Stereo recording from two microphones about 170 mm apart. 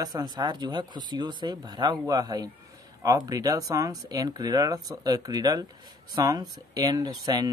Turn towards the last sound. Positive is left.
turn(degrees=-25)  # may be behind; listen again after turning